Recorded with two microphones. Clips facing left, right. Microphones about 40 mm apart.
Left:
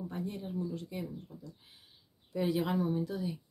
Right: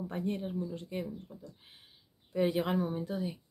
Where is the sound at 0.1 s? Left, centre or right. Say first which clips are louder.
Right 4 dB; right.